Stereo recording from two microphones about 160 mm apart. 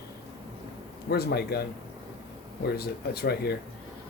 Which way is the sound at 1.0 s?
85° left.